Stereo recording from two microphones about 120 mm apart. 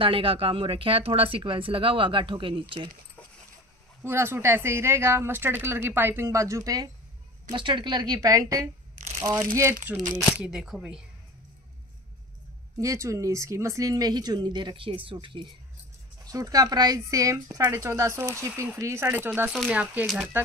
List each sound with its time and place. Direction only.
0.0 s speech: 50° right (ahead or behind)
4.0 s a woman's voice: 20° right (ahead or behind)
7.5 s speech: 45° right (ahead or behind)
8.9 s crumpling: 90° right
9.2 s a woman's voice: 30° right (ahead or behind)
10.3 s speech: 10° right (ahead or behind)
12.7 s speech: 25° right (ahead or behind); by 15.4 s 45° right (ahead or behind)
16.3 s a woman's voice: 30° right (ahead or behind); by 20.1 s 15° right (ahead or behind)